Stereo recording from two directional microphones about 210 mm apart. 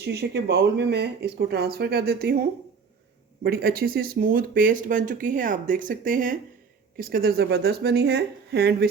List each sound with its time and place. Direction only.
0.0 s speech: 55° right (ahead or behind)
3.4 s speech: 45° right (ahead or behind)